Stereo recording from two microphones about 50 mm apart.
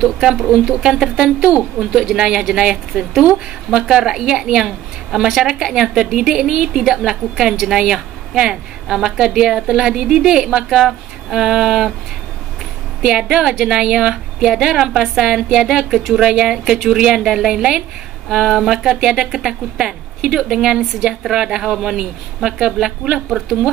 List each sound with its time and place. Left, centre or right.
0.0 s a woman's voice: centre
10.9 s a sound: centre
13.0 s a woman's voice: centre